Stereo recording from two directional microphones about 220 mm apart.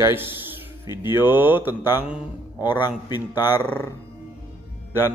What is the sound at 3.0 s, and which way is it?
Speech, 20° left (ahead or behind).